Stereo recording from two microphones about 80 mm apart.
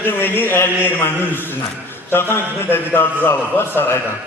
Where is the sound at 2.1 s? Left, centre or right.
Left.